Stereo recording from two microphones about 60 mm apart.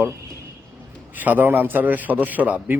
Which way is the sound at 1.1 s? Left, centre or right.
Right.